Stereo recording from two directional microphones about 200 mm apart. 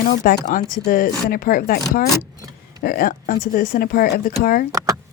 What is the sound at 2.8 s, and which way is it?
Speech, 45° left (ahead or behind).